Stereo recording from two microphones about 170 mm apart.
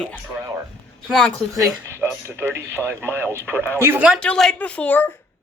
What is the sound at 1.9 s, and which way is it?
Speech, 15° right (ahead or behind).